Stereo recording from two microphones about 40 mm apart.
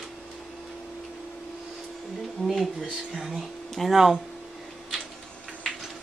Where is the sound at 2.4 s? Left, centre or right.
Centre.